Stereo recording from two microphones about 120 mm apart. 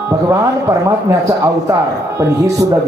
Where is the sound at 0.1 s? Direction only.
30° right (ahead or behind).